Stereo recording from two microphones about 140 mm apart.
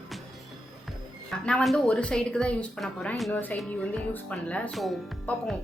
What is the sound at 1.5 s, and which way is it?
A woman's voice, 5° left (ahead or behind).